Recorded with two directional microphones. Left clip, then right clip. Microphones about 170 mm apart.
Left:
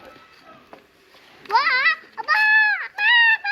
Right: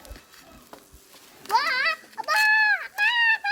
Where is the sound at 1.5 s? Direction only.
90° right.